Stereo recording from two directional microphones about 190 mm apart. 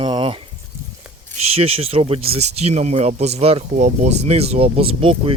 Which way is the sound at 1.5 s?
30° right (ahead or behind).